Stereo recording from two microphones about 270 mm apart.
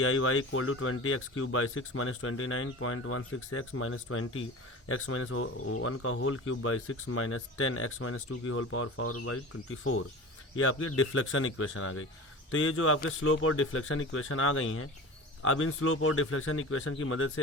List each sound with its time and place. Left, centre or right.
0.0 s speech: left
10.6 s speech: left